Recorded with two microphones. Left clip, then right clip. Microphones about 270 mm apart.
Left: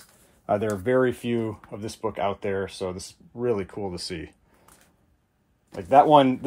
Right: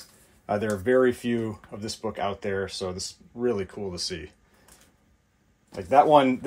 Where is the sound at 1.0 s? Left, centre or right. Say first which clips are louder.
Right 1 dB; left.